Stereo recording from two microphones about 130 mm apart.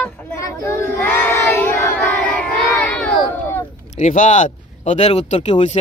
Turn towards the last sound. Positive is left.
turn(degrees=55)  # may be behind; listen again after turning